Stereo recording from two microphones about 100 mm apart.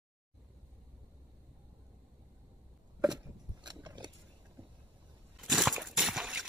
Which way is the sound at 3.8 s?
45° right (ahead or behind).